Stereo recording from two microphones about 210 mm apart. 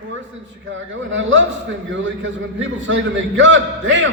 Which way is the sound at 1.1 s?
65° right (ahead or behind).